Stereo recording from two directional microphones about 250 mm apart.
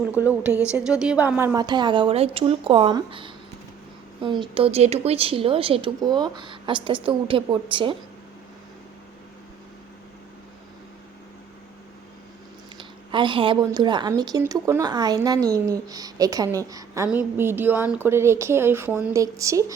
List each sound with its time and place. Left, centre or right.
0.2 s a woman's voice: centre
0.5 s a woman's voice: centre
0.9 s speech: centre; by 7.9 s right
12.7 s a woman's voice: centre